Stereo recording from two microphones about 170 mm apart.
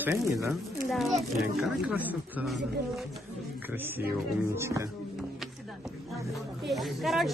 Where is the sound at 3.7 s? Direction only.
10° right (ahead or behind).